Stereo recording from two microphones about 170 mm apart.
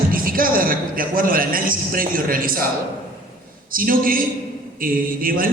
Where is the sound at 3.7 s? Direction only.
55° right (ahead or behind).